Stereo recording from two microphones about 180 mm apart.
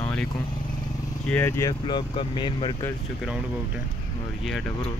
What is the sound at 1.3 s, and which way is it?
Speech, 10° left (ahead or behind).